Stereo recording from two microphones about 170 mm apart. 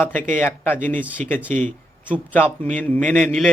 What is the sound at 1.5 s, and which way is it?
Speech, 50° right (ahead or behind).